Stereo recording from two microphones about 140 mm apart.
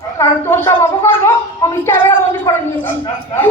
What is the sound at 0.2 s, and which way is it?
Speech, 20° left (ahead or behind).